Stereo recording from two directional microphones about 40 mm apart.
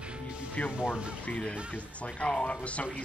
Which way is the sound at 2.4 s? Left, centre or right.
Left.